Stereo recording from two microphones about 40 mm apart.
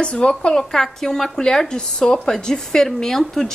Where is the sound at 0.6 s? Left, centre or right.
Centre.